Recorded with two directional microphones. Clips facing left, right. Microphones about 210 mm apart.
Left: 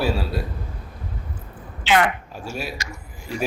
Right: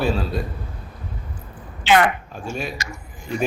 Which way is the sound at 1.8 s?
50° right (ahead or behind).